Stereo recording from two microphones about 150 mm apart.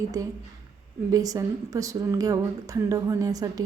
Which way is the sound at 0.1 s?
25° right (ahead or behind).